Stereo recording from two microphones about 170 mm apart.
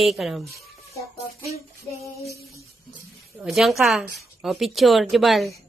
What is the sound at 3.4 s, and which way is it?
A woman's voice, centre (ahead or behind).